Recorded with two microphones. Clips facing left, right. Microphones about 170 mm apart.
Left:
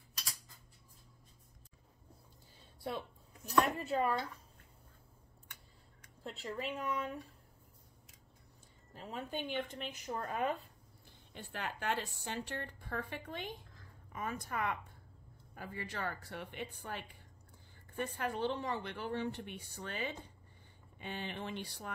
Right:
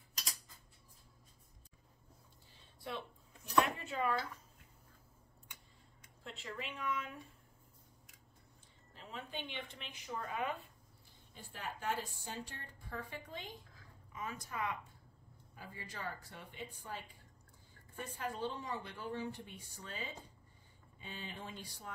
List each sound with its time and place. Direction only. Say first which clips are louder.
2.8 s a woman's voice: left 4 dB; 40° left (ahead or behind)
6.4 s a woman's voice: left 4 dB; 35° left (ahead or behind)
8.9 s a woman's voice: left 5 dB; 45° left (ahead or behind)
11.3 s a woman's voice: left 4 dB; 70° left (ahead or behind)